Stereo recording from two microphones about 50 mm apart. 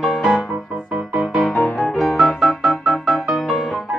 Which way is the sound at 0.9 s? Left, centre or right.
Centre.